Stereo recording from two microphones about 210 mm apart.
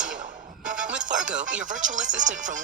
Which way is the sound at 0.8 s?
5° right (ahead or behind).